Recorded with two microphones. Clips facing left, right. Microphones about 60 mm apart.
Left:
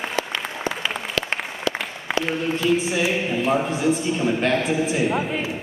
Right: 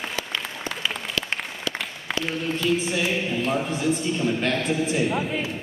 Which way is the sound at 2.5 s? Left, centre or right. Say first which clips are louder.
Left 3 dB; centre.